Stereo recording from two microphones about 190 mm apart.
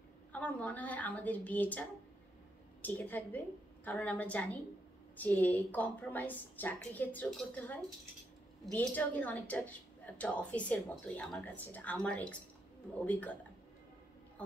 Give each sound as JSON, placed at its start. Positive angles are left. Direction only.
{"t": 0.3, "sound": "a woman's voice", "side_deg": 10}